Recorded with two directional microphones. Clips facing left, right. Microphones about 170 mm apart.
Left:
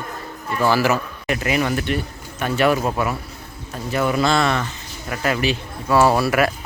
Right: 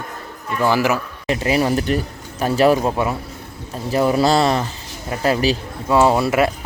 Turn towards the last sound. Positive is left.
turn(degrees=-20)  # may be behind; listen again after turning